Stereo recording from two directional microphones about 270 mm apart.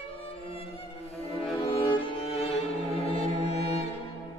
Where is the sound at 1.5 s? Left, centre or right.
Centre.